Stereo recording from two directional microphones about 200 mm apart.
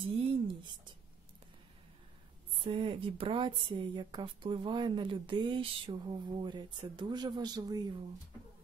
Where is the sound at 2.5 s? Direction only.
25° right (ahead or behind).